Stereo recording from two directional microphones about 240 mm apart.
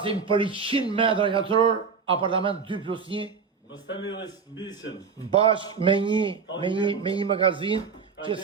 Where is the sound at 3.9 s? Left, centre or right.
Left.